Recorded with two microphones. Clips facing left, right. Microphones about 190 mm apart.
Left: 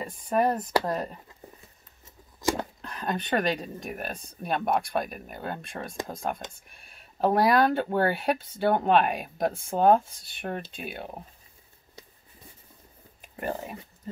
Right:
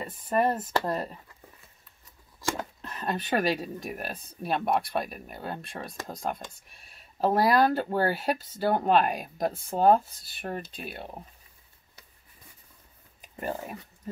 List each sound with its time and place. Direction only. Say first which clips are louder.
0.0 s speech: left 1 dB; centre (ahead or behind)
2.4 s a sound: left 5 dB; 20° left (ahead or behind)
2.8 s speech: left 1 dB; centre (ahead or behind)
13.4 s speech: left 1 dB; centre (ahead or behind)